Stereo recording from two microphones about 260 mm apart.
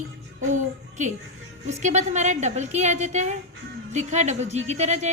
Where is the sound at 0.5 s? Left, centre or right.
Right.